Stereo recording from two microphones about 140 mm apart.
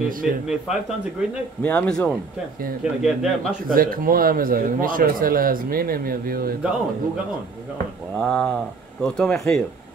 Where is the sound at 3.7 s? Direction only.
85° right.